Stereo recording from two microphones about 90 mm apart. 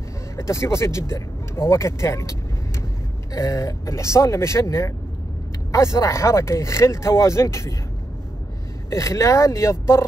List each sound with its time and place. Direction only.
0.4 s speech: 30° left (ahead or behind)
3.3 s speech: 40° left (ahead or behind)
8.9 s speech: 35° left (ahead or behind)